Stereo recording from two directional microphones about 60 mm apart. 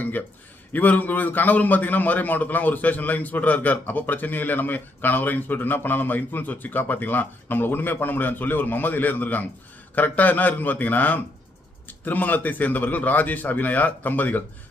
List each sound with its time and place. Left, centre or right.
0.7 s a man's voice: left